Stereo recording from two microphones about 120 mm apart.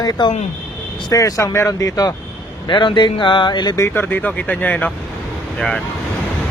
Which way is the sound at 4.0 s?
15° left (ahead or behind).